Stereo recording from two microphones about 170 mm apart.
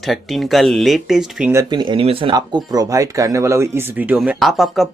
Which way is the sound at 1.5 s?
20° right (ahead or behind).